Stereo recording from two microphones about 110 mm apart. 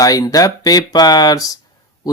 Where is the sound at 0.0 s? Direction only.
30° left (ahead or behind).